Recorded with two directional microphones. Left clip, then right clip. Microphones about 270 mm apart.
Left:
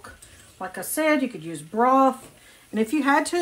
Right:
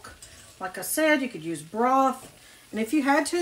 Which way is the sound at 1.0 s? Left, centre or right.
Centre.